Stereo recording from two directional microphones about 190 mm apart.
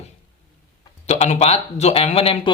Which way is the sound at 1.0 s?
35° left (ahead or behind).